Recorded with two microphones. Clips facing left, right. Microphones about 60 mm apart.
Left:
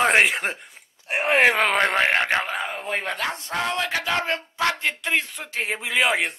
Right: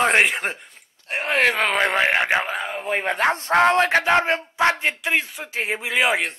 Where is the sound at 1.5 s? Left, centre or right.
Centre.